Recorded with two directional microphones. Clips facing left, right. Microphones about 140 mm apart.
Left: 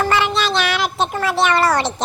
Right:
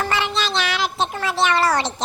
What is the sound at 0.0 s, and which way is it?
Cat, 60° left (ahead or behind).